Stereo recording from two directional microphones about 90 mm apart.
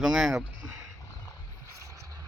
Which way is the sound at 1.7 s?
35° right (ahead or behind).